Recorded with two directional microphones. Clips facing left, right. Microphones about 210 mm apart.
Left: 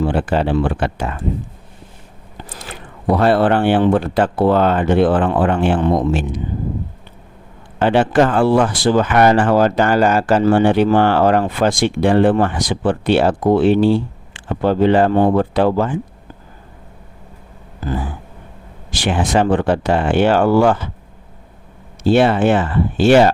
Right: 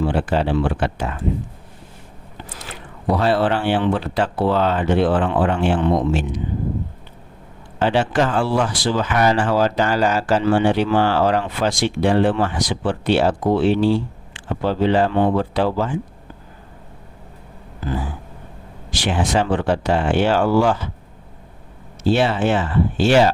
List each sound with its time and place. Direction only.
0.0 s speech: 55° left (ahead or behind)
3.1 s speech: 55° left (ahead or behind)
7.8 s speech: 55° left (ahead or behind)
18.9 s speech: 55° left (ahead or behind)
22.0 s speech: 55° left (ahead or behind)